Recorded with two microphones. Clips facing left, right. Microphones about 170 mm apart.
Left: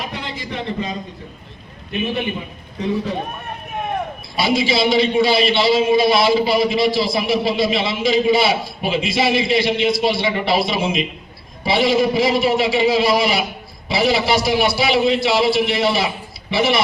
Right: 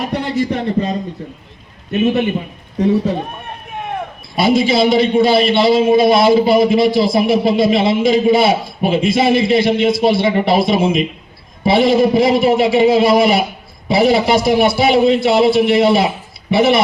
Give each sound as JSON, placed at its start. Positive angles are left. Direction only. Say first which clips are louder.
{"t": 0.0, "sound": "a man's voice", "louder": "right 11 dB", "side_deg": -40}
{"t": 4.4, "sound": "a man's voice", "louder": "right 5 dB", "side_deg": -50}